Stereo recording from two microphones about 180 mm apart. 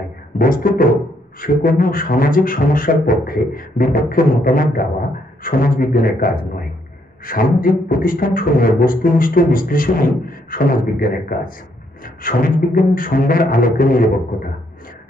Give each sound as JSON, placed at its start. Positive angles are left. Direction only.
{"t": 0.4, "sound": "beatboxing", "side_deg": 50}